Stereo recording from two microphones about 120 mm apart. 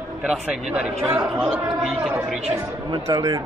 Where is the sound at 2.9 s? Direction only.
35° right (ahead or behind).